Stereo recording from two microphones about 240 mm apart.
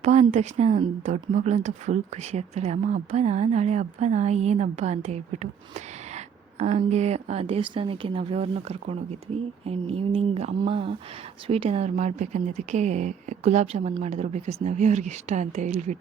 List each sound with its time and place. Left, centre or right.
0.0 s speech: right
6.6 s speech: right